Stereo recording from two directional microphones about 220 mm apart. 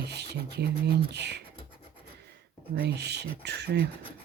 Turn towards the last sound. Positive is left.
turn(degrees=-50)  # may be behind; listen again after turning